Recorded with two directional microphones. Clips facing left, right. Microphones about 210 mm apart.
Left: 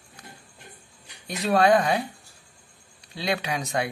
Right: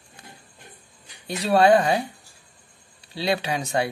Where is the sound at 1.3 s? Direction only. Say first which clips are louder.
Right 3 dB; 30° right (ahead or behind).